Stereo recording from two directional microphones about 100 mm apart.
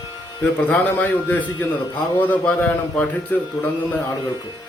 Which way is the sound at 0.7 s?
15° left (ahead or behind).